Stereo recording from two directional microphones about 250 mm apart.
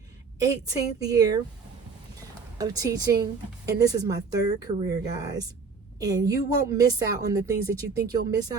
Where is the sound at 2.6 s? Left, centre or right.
Centre.